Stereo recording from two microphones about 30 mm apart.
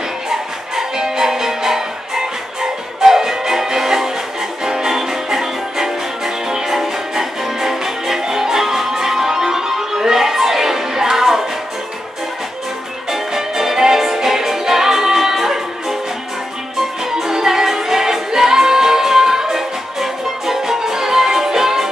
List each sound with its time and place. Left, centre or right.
0.3 s music: centre
13.1 s music: centre
17.0 s music: centre